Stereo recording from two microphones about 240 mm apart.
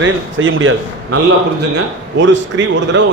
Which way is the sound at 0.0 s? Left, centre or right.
Right.